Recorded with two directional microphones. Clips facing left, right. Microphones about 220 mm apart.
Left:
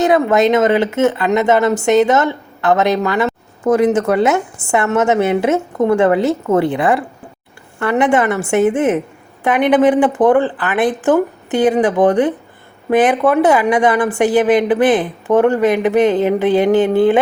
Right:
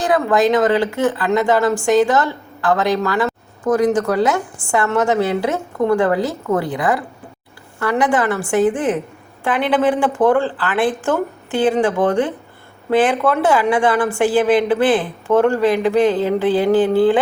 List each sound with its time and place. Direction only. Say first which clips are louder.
0.0 s speech: left 3 dB; 20° left (ahead or behind)